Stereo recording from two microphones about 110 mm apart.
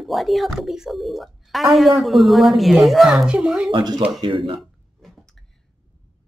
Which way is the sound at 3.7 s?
40° right (ahead or behind).